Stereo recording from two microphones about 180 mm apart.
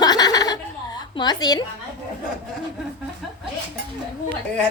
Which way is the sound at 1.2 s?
20° left (ahead or behind).